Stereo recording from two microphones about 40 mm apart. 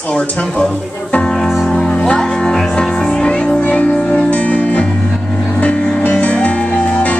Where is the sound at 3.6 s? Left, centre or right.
Left.